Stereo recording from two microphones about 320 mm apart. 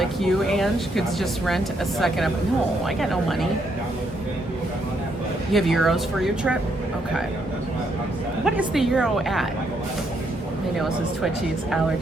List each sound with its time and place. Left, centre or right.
0.0 s speech: centre
5.5 s speech: centre
8.4 s speech: centre
10.8 s speech: centre